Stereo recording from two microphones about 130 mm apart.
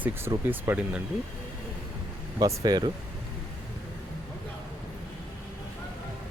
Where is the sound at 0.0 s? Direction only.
20° right (ahead or behind).